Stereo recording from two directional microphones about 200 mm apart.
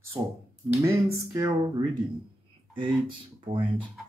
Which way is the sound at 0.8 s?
15° right (ahead or behind).